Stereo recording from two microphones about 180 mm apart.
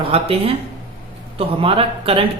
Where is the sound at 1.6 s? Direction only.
30° right (ahead or behind).